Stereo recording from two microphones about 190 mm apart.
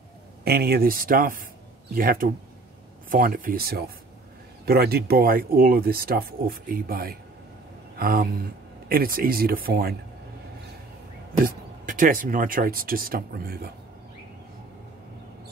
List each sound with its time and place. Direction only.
0.4 s speech: 55° right (ahead or behind)
11.4 s speech: 45° right (ahead or behind)